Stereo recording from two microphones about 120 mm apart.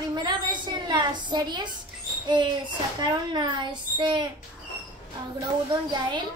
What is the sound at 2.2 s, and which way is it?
A child's voice, 40° right (ahead or behind).